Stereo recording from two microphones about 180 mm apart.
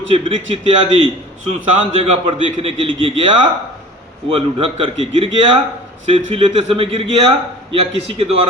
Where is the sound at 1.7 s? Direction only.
30° right (ahead or behind).